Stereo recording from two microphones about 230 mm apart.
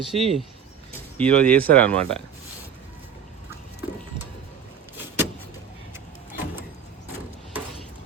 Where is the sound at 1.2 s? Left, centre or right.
Centre.